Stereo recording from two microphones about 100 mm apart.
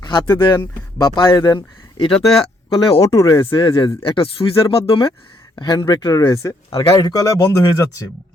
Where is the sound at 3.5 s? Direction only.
55° left (ahead or behind).